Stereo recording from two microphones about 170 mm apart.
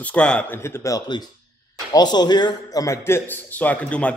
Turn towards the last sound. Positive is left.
turn(degrees=5)  # may be behind; listen again after turning